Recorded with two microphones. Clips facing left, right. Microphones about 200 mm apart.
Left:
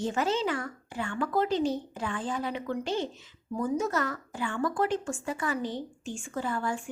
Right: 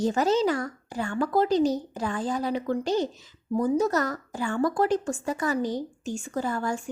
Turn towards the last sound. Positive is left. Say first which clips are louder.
# right 3 dB
turn(degrees=-40)  # may be behind; listen again after turning